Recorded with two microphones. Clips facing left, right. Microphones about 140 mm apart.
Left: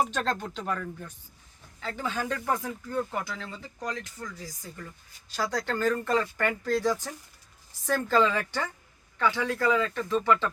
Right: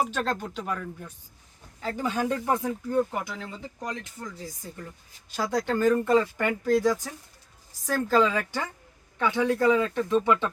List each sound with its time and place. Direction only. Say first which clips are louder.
0.0 s speech: even; 5° right (ahead or behind)